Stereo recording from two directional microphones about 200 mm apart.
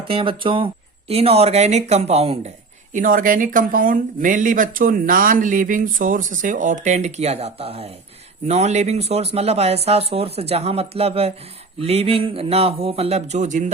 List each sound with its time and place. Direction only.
0.1 s speech: 25° right (ahead or behind)
2.9 s speech: 40° right (ahead or behind)